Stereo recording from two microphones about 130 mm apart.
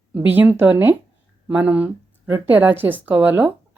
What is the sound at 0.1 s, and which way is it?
A woman's voice, 15° right (ahead or behind).